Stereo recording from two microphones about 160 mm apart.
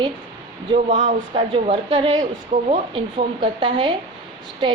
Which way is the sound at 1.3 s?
30° right (ahead or behind).